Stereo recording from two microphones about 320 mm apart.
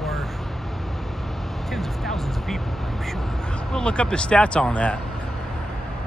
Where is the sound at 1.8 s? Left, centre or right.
Centre.